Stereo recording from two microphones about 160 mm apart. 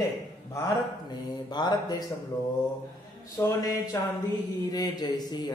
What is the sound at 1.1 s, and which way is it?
Speech, 25° left (ahead or behind).